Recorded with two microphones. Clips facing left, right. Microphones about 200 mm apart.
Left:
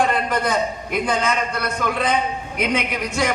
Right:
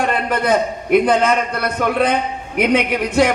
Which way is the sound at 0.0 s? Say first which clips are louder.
Right 2 dB; 60° right (ahead or behind).